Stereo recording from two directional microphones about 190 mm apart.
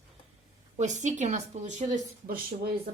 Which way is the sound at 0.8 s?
40° right (ahead or behind).